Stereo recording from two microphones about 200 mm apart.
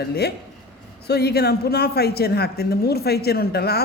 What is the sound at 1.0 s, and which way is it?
Speech, 55° left (ahead or behind).